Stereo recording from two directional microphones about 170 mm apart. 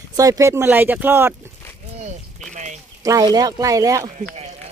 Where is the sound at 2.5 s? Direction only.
45° right (ahead or behind).